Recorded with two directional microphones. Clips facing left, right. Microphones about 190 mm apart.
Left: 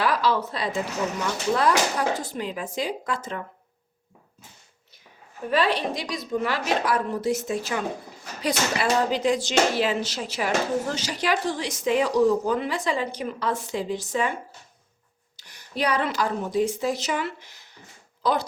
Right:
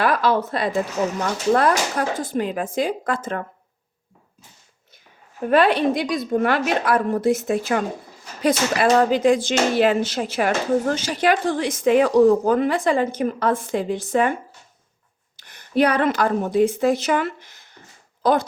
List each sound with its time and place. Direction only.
0.0 s speech: 55° right (ahead or behind)
5.5 s a woman's voice: 55° right (ahead or behind)
15.4 s a woman's voice: 55° right (ahead or behind)